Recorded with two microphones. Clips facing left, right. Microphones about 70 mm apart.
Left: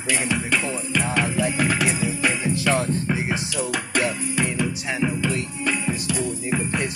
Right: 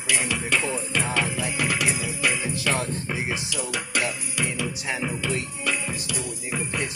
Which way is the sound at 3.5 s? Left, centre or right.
Left.